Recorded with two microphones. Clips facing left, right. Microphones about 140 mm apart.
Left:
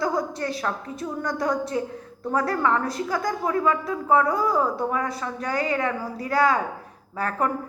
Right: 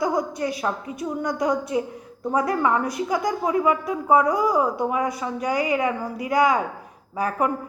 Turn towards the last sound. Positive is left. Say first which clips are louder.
# right 2 dB
turn(degrees=-15)  # may be behind; listen again after turning